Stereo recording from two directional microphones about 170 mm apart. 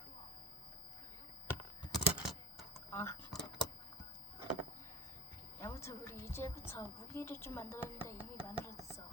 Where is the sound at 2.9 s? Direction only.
15° left (ahead or behind).